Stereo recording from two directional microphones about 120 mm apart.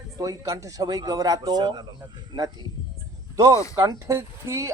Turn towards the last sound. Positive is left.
turn(degrees=-25)  # may be behind; listen again after turning